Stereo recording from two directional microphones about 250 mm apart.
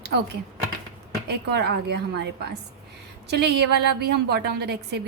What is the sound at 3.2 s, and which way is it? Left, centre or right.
A woman's voice, right.